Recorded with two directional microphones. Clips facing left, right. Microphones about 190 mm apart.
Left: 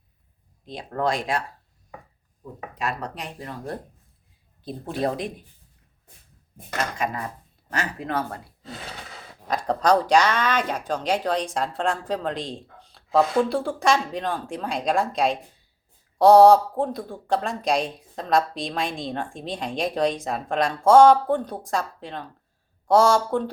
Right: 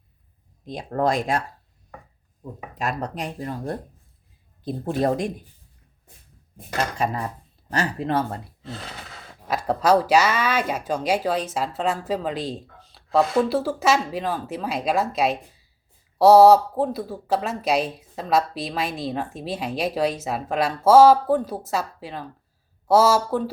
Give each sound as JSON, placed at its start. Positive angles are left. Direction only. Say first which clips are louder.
{"t": 0.6, "sound": "speech", "louder": "right 3 dB", "side_deg": -45}
{"t": 4.6, "sound": "speech", "louder": "right 3 dB", "side_deg": -45}
{"t": 7.0, "sound": "speech", "louder": "right 3 dB", "side_deg": -35}
{"t": 9.5, "sound": "speech", "louder": "right 1 dB", "side_deg": -5}